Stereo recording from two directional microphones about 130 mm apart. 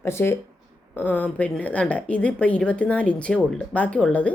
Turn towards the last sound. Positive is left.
turn(degrees=10)  # may be behind; listen again after turning